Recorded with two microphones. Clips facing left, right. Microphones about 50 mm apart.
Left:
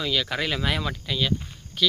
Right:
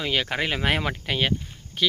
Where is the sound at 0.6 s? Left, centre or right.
Right.